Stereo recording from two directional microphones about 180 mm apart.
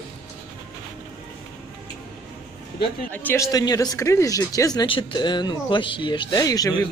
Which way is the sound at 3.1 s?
10° left (ahead or behind).